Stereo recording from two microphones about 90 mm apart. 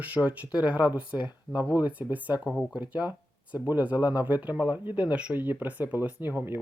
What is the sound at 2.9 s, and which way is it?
Speech, 55° left (ahead or behind).